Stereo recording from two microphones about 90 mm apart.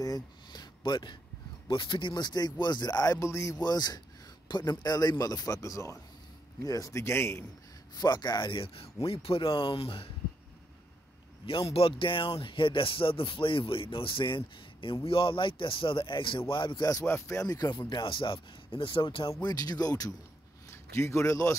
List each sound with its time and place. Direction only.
0.0 s a sound: 45° left (ahead or behind)
1.7 s speech: 70° left (ahead or behind); by 3.5 s 35° left (ahead or behind)
3.5 s a man's voice: 50° left (ahead or behind); by 7.4 s 30° left (ahead or behind)
7.9 s speech: 50° left (ahead or behind); by 10.0 s 80° left
11.4 s speech: 90° left; by 15.0 s 70° left (ahead or behind)
15.0 s speech: 90° left; by 16.8 s 65° left (ahead or behind)
17.0 s speech: 30° left (ahead or behind); by 19.3 s 70° left (ahead or behind)
19.4 s speech: 45° left (ahead or behind)
20.7 s a man's voice: 30° left (ahead or behind)